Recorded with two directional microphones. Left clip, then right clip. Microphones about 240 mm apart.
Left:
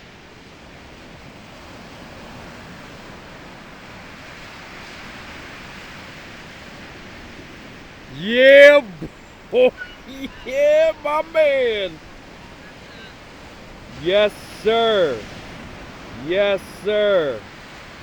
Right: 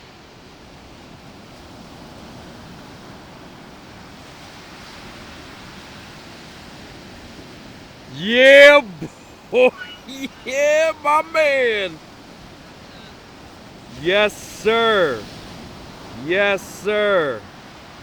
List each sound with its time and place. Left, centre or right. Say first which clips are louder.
8.2 s a sound: even; centre
14.0 s speech: even; centre
16.3 s speech: right 1 dB; centre